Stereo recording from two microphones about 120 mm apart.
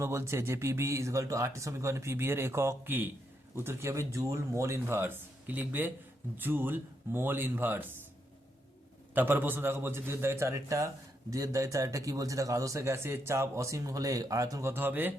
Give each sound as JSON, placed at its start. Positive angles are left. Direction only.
{"t": 0.0, "sound": "speech", "side_deg": -20}
{"t": 9.1, "sound": "speech", "side_deg": -20}
{"t": 14.7, "sound": "speech", "side_deg": -15}